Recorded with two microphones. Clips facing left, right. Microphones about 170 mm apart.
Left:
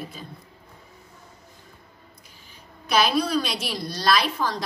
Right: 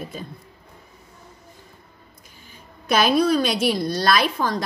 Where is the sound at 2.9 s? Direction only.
50° right (ahead or behind).